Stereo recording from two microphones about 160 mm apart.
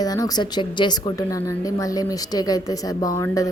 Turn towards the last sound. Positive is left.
turn(degrees=20)  # may be behind; listen again after turning